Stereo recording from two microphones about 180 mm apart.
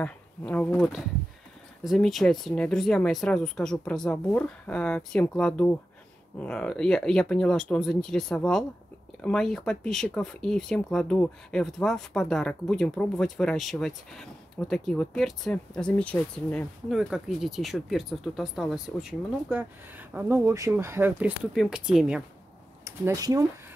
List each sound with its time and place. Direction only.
0.0 s speech: 10° left (ahead or behind)
22.8 s speech: 20° right (ahead or behind)